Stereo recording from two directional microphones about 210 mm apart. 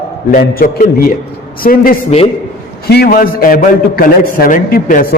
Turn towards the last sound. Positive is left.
turn(degrees=40)  # may be behind; listen again after turning